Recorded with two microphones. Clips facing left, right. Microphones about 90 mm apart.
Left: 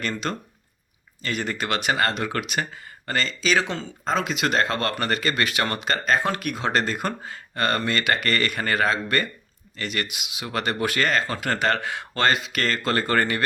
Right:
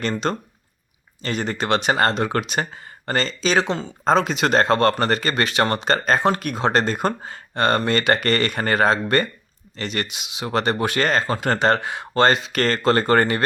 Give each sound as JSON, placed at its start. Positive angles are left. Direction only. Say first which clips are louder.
{"t": 0.0, "sound": "speech", "louder": "right 5 dB", "side_deg": -30}
{"t": 3.7, "sound": "speech", "louder": "right 5 dB", "side_deg": -20}
{"t": 4.0, "sound": "speech", "louder": "right 6 dB", "side_deg": -35}
{"t": 12.3, "sound": "speech", "louder": "right 4 dB", "side_deg": -35}